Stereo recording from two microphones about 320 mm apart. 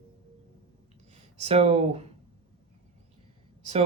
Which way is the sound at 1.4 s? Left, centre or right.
Centre.